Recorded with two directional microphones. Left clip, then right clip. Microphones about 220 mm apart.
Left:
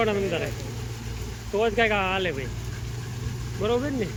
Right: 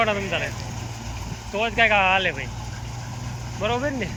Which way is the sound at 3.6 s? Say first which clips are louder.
Right 1 dB; 10° left (ahead or behind).